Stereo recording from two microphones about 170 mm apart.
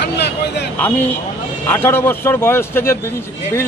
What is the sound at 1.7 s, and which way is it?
A man's voice, 15° left (ahead or behind).